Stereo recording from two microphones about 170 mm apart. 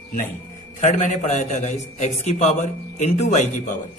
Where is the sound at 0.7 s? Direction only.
45° left (ahead or behind).